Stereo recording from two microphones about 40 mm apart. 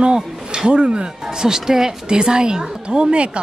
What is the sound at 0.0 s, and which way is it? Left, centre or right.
A woman's voice, centre.